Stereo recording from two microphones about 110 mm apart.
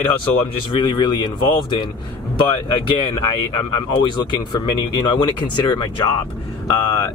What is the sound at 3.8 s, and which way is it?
Speech, 40° left (ahead or behind).